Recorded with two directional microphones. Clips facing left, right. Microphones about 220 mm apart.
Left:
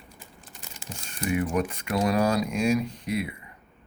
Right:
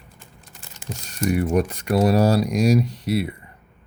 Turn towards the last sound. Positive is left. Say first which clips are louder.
# right 6 dB
turn(degrees=-35)  # may be behind; listen again after turning